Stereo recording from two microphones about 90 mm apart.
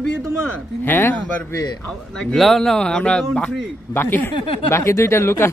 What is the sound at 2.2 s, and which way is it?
Speech, 5° left (ahead or behind).